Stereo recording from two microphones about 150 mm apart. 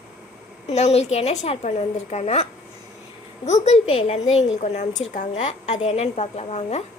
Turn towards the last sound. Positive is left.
turn(degrees=45)  # may be behind; listen again after turning